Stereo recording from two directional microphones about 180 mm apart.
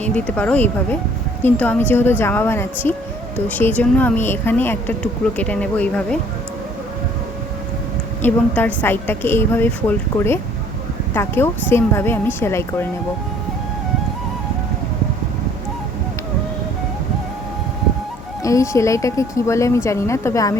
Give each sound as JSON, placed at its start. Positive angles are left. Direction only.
{"t": 0.0, "sound": "speech", "side_deg": 5}
{"t": 8.2, "sound": "speech", "side_deg": 10}
{"t": 11.1, "sound": "speech", "side_deg": 15}
{"t": 18.4, "sound": "speech", "side_deg": 15}